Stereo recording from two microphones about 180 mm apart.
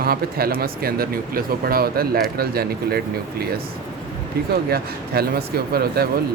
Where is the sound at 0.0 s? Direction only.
55° right (ahead or behind).